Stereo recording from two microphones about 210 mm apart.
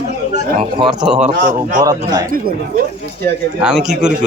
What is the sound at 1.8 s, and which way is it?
Speech, 20° right (ahead or behind).